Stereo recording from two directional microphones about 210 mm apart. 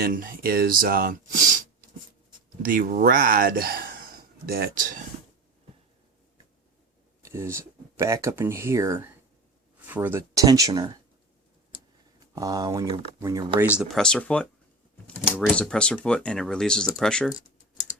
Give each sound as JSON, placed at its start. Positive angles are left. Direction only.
{"t": 0.0, "sound": "speech", "side_deg": -45}
{"t": 2.6, "sound": "speech", "side_deg": -45}
{"t": 7.2, "sound": "speech", "side_deg": -15}
{"t": 12.2, "sound": "speech", "side_deg": -15}
{"t": 13.7, "sound": "speech", "side_deg": 0}
{"t": 17.3, "sound": "computer keyboard", "side_deg": 15}